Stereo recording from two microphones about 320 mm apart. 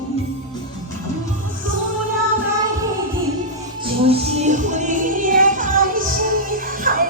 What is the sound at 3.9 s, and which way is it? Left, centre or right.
Music, centre.